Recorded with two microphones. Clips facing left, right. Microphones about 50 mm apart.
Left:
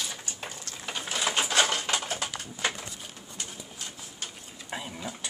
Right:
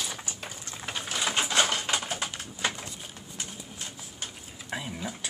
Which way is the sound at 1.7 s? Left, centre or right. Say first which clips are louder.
Even; centre.